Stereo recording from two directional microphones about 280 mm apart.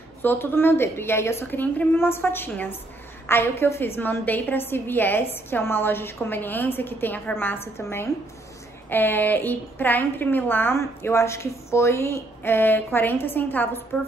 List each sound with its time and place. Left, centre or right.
0.2 s a woman's voice: centre